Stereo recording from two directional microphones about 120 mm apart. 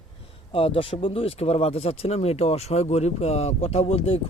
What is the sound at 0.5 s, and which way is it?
Speech, 50° left (ahead or behind).